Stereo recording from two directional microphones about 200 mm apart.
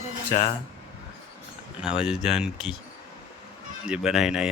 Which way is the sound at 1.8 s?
5° right (ahead or behind).